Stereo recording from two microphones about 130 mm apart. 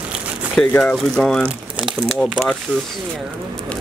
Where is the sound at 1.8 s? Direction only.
5° right (ahead or behind).